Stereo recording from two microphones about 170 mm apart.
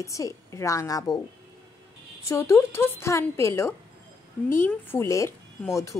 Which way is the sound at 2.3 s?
15° left (ahead or behind).